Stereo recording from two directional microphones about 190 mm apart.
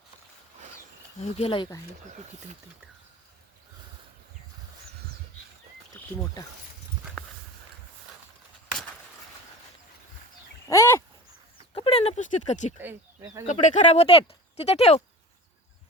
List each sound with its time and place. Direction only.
1.2 s speech: 30° left (ahead or behind)
6.0 s wild animals: 10° left (ahead or behind)
10.7 s a sound: 15° left (ahead or behind)
11.5 s a sound: 30° left (ahead or behind)
12.8 s speech: 10° right (ahead or behind)
13.5 s speech: 40° left (ahead or behind)